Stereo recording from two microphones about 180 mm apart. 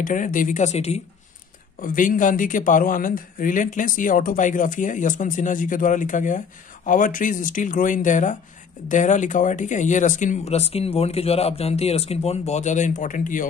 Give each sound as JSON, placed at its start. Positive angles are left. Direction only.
{"t": 0.0, "sound": "speech", "side_deg": 45}
{"t": 1.8, "sound": "speech", "side_deg": 45}